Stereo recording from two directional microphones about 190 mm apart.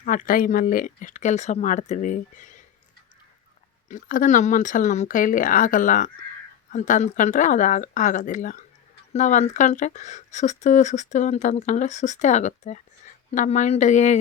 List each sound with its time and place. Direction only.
0.0 s speech: 45° left (ahead or behind)
3.8 s speech: 45° left (ahead or behind)